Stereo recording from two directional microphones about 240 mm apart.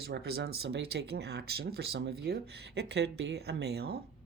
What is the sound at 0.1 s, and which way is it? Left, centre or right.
Speech, right.